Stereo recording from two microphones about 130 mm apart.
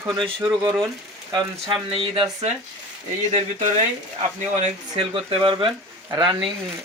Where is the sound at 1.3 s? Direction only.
30° right (ahead or behind).